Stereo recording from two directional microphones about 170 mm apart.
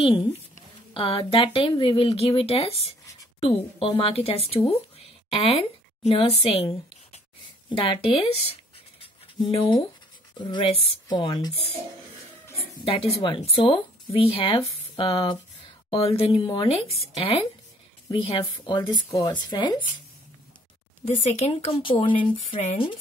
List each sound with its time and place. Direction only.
0.0 s speech: 30° left (ahead or behind)
9.5 s speech: 30° left (ahead or behind)
12.8 s speech: 35° left (ahead or behind)
21.2 s speech: 40° left (ahead or behind)